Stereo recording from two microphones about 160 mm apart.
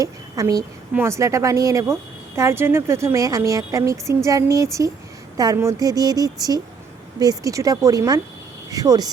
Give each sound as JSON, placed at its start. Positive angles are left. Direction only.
{"t": 0.0, "sound": "a woman's voice", "side_deg": -20}